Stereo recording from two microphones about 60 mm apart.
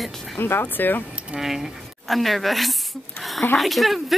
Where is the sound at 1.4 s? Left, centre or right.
Centre.